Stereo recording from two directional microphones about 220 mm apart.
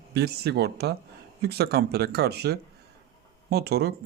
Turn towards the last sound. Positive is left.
turn(degrees=-45)  # may be behind; listen again after turning